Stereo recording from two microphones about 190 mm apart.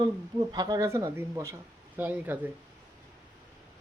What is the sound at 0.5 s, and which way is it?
Speech, 20° right (ahead or behind).